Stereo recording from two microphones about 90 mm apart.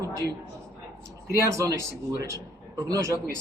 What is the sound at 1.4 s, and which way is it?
Speech, 35° right (ahead or behind).